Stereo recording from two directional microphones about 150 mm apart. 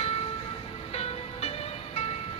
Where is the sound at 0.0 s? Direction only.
45° left (ahead or behind).